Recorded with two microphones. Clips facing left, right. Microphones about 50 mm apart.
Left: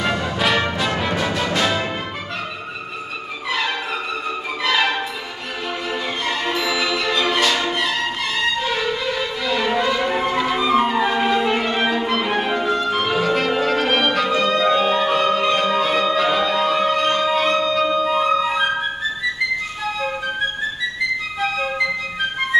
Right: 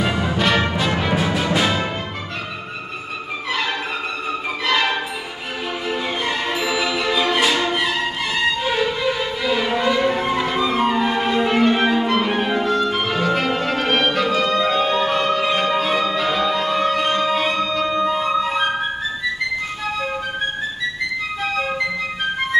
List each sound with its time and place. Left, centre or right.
0.0 s music: centre
0.4 s music: centre
4.6 s music: centre
21.4 s music: centre